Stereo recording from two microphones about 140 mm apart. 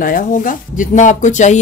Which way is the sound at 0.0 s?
70° left (ahead or behind).